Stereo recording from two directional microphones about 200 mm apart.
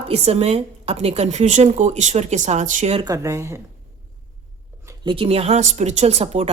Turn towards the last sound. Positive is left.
turn(degrees=-30)  # may be behind; listen again after turning